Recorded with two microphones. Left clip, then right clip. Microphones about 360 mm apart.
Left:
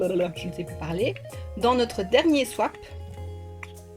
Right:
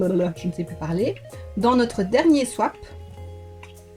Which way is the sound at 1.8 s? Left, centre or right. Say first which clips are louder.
Right 2 dB; left.